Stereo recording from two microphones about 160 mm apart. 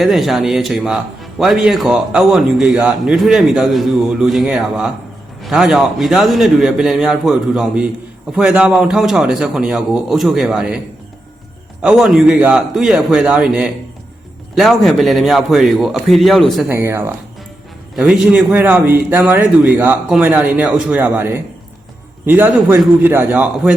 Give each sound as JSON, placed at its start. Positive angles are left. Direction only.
{"t": 0.0, "sound": "a man's voice", "side_deg": 0}
{"t": 11.8, "sound": "a man's voice", "side_deg": -5}
{"t": 16.6, "sound": "a man's voice", "side_deg": -15}
{"t": 17.9, "sound": "a man's voice", "side_deg": -5}